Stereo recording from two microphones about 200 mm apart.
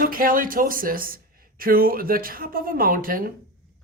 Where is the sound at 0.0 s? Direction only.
45° right (ahead or behind).